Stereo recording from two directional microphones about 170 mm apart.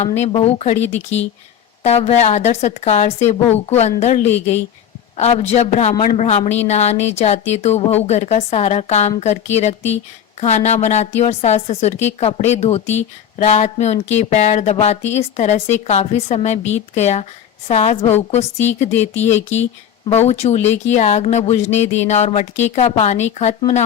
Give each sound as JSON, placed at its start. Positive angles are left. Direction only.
{"t": 0.0, "sound": "a woman's voice", "side_deg": 40}
{"t": 0.8, "sound": "speech", "side_deg": 90}
{"t": 1.8, "sound": "a woman's voice", "side_deg": 40}